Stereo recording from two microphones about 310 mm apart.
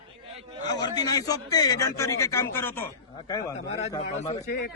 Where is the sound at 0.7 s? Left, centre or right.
Centre.